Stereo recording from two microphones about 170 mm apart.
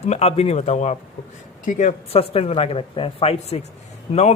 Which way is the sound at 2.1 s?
35° left (ahead or behind).